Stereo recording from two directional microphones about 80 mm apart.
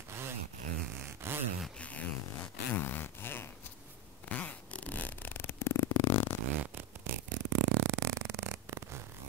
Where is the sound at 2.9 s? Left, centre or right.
Left.